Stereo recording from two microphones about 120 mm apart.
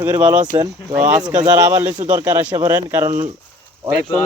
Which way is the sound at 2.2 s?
15° right (ahead or behind).